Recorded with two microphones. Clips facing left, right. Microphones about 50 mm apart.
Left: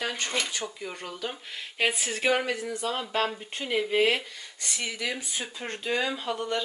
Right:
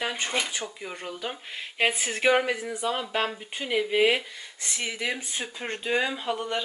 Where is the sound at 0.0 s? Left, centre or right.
Centre.